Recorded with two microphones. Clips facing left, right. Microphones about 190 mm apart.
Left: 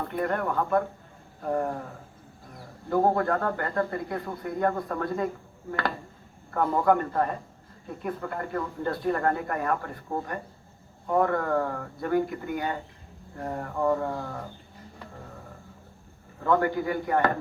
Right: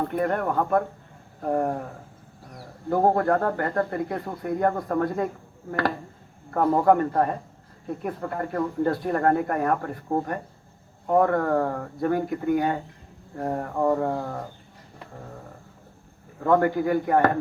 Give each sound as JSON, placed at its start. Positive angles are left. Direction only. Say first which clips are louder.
{"t": 0.0, "sound": "speech", "louder": "right 3 dB", "side_deg": -45}
{"t": 6.5, "sound": "speech", "louder": "right 4 dB", "side_deg": -40}
{"t": 16.4, "sound": "speech", "louder": "right 4 dB", "side_deg": -45}